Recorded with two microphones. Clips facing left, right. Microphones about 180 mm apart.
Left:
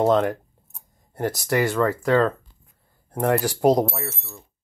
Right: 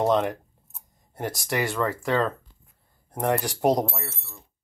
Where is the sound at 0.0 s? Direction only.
Centre (ahead or behind).